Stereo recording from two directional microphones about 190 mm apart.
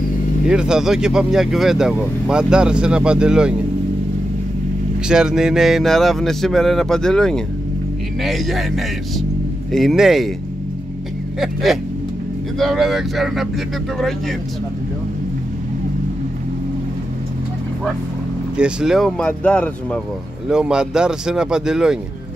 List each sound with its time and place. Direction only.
0.5 s speech: 5° right (ahead or behind)
5.0 s speech: 5° right (ahead or behind)
11.3 s speech: centre (ahead or behind)
18.6 s speech: 5° right (ahead or behind)